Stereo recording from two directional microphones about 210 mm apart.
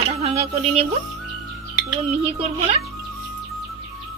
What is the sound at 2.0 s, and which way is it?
Speech, 30° right (ahead or behind).